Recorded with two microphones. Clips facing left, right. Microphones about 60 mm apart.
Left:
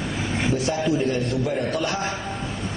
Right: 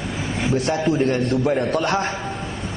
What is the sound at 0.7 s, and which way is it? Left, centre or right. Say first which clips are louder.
A man's voice: right 4 dB; right.